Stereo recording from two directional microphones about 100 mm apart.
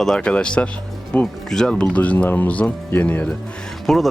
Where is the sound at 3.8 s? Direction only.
Centre (ahead or behind).